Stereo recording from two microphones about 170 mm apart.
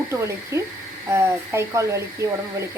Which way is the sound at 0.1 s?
15° right (ahead or behind).